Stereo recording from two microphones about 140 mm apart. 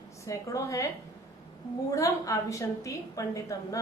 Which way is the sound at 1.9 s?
20° left (ahead or behind).